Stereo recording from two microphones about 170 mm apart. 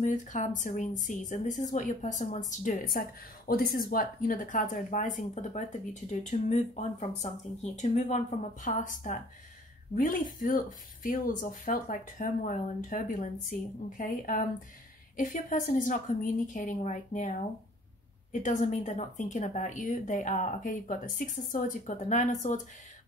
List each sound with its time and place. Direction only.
0.0 s a woman's voice: 50° left (ahead or behind)